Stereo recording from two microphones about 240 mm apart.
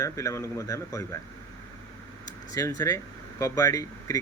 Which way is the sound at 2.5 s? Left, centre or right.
Centre.